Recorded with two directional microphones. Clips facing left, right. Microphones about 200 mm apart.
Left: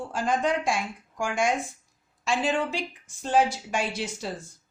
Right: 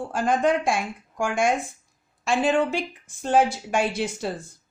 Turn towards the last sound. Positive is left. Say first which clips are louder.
# right 5 dB
turn(degrees=-55)  # may be behind; listen again after turning